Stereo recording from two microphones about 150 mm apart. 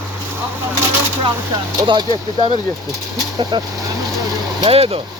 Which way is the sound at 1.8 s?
30° right (ahead or behind).